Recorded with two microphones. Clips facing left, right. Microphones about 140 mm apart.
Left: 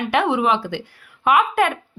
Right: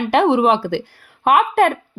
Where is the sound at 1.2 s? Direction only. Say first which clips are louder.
Right 3 dB; 45° right (ahead or behind).